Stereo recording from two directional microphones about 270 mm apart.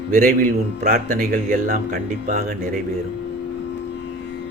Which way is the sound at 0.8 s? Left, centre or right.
Right.